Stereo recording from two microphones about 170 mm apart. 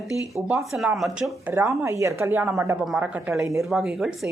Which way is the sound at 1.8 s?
15° right (ahead or behind).